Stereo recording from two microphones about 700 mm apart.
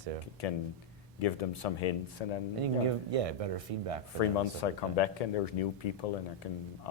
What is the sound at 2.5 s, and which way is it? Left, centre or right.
Speech, right.